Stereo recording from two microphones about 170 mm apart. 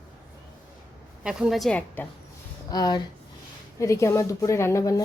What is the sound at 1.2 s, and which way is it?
Speech, 5° right (ahead or behind).